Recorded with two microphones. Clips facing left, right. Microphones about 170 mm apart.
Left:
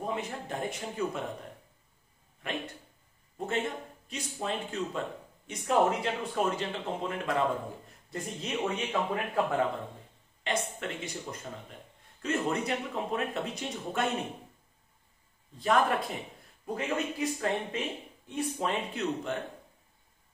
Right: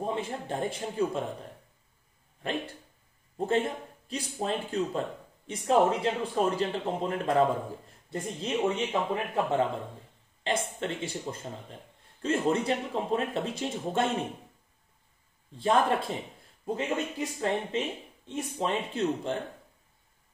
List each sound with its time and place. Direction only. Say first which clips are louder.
0.0 s speech: right 2 dB; 30° right (ahead or behind)
2.4 s speech: right 3 dB; 35° right (ahead or behind)
15.5 s speech: right 2 dB; 30° right (ahead or behind)